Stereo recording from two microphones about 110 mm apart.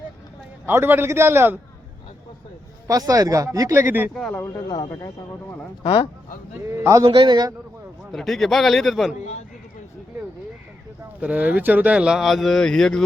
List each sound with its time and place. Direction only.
0.6 s speech: 20° right (ahead or behind)
2.8 s speech: 30° right (ahead or behind)
4.1 s a man's voice: 5° left (ahead or behind)
4.4 s speech: 20° left (ahead or behind)
5.8 s speech: 50° left (ahead or behind)
6.7 s speech: 25° right (ahead or behind)
7.1 s a man's voice: 45° right (ahead or behind)
8.1 s a man's voice: centre (ahead or behind)
11.2 s speech: 15° right (ahead or behind); by 13.1 s 5° left (ahead or behind)